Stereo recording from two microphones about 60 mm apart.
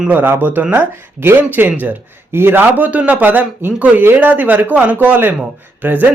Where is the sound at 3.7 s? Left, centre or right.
Right.